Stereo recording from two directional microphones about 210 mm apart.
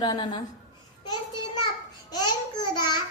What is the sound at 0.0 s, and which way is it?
A woman's voice, 20° left (ahead or behind).